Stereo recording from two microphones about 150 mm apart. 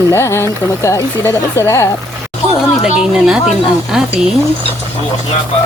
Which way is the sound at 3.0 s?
5° right (ahead or behind).